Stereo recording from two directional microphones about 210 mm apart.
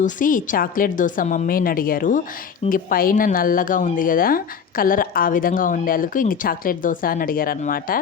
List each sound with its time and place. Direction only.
0.0 s speech: 40° left (ahead or behind)